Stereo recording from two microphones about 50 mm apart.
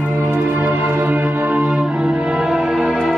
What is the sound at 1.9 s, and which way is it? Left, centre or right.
Music, right.